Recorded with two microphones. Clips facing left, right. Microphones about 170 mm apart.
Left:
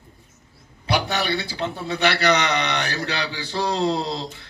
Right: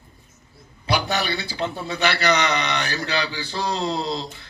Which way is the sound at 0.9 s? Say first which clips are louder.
Even; 65° left (ahead or behind).